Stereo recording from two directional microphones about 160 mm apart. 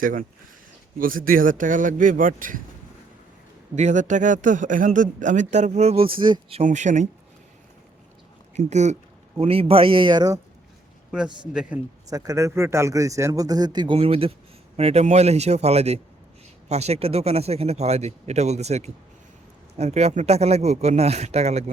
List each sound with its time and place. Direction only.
0.0 s speech: 60° right (ahead or behind)
3.8 s speech: 45° right (ahead or behind); by 6.6 s 30° right (ahead or behind)
6.6 s speech: 50° right (ahead or behind)
8.5 s speech: 45° right (ahead or behind); by 10.4 s 25° right (ahead or behind)
11.5 s speech: 5° right (ahead or behind)
12.1 s a man's voice: 20° right (ahead or behind); by 21.6 s 45° right (ahead or behind)